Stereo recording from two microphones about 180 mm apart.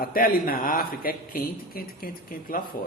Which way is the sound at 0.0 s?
50° left (ahead or behind).